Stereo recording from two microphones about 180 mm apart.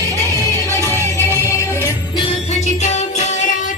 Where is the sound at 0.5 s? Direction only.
15° left (ahead or behind).